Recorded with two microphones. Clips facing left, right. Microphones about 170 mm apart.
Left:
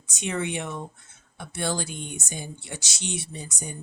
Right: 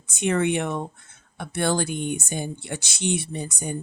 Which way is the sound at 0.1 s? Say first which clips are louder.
Right 7 dB; 55° right (ahead or behind).